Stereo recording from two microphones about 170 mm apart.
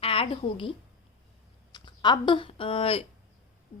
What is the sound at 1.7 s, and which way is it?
A woman's voice, 25° left (ahead or behind).